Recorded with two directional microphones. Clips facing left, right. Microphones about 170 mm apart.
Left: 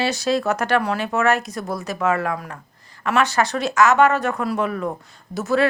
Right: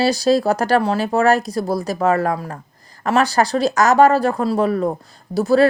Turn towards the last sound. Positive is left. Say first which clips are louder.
# right 6 dB
turn(degrees=-35)  # may be behind; listen again after turning